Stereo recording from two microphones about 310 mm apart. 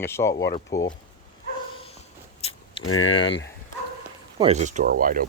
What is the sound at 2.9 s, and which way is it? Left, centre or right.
Speech, left.